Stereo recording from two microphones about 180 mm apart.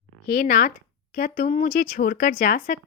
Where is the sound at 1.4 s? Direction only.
45° left (ahead or behind).